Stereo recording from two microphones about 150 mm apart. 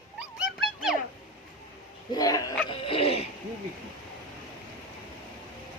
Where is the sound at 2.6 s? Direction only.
35° left (ahead or behind).